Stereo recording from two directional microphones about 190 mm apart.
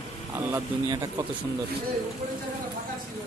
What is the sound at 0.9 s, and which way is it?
Speech, 20° right (ahead or behind).